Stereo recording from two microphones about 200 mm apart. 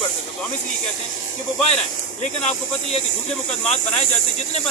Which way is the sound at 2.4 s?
30° left (ahead or behind).